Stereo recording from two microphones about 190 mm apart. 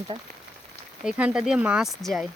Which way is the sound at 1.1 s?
5° right (ahead or behind).